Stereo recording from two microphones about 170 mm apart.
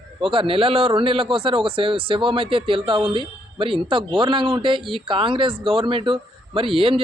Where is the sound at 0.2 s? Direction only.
30° right (ahead or behind).